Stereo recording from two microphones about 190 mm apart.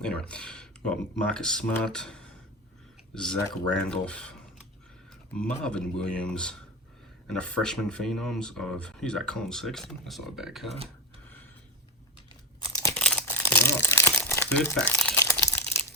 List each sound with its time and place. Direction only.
0.0 s speech: 5° left (ahead or behind)
5.6 s speech: 5° left (ahead or behind)
12.5 s crumpling: 20° left (ahead or behind)
12.9 s crumpling: 5° left (ahead or behind)